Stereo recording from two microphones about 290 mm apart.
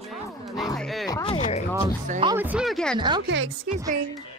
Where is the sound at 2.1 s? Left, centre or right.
Centre.